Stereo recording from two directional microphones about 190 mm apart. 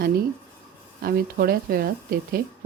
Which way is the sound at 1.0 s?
50° right (ahead or behind).